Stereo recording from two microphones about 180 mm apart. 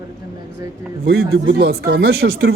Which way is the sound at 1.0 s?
65° right (ahead or behind).